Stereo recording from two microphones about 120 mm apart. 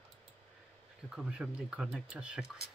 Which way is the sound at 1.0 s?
5° right (ahead or behind).